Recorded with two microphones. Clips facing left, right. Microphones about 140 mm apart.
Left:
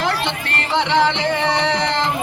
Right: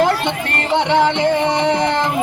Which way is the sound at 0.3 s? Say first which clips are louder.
Right 4 dB; 50° right (ahead or behind).